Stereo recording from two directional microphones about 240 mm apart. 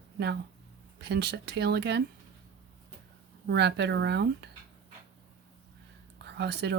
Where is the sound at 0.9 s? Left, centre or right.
Right.